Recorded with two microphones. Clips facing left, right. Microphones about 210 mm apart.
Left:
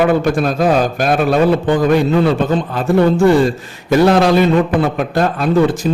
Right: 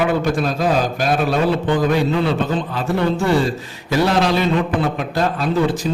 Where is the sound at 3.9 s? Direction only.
55° left (ahead or behind).